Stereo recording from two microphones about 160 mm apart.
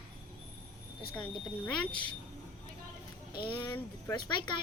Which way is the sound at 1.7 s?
30° left (ahead or behind).